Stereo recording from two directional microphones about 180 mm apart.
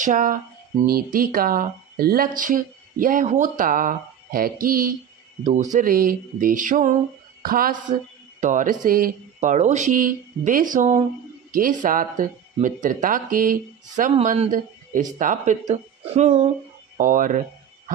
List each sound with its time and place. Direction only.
0.0 s a man's voice: 45° right (ahead or behind)